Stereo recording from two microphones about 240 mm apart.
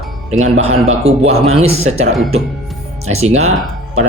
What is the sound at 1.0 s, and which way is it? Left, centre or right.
Speech, right.